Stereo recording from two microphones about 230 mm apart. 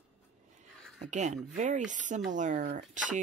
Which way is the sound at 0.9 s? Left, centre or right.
Right.